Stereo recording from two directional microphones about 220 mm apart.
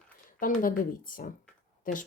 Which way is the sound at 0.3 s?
40° left (ahead or behind).